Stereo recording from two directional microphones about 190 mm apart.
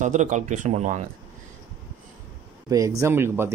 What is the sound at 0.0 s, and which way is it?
Speech, 40° right (ahead or behind).